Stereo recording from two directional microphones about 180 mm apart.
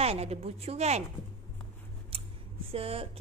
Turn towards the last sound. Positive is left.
turn(degrees=-30)  # may be behind; listen again after turning